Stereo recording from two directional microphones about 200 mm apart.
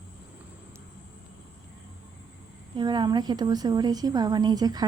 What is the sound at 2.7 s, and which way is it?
A woman's voice, 20° right (ahead or behind).